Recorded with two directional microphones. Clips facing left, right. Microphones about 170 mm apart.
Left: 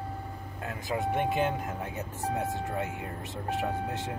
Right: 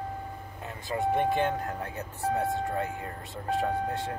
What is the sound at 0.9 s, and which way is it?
Speech, 10° left (ahead or behind).